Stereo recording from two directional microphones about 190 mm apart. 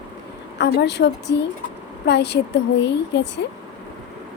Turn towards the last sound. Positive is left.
turn(degrees=65)  # may be behind; listen again after turning